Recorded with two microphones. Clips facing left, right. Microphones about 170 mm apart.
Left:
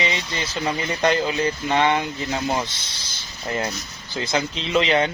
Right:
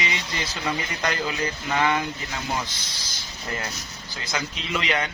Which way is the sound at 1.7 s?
30° left (ahead or behind).